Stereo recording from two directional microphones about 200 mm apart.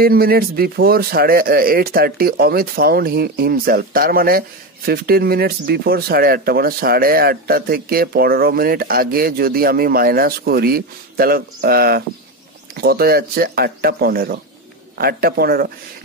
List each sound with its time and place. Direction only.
0.0 s speech: 50° right (ahead or behind)